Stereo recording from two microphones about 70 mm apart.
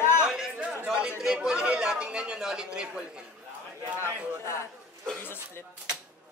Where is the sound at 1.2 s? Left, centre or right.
Centre.